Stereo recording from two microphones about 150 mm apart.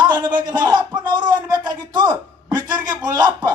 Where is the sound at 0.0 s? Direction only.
30° right (ahead or behind).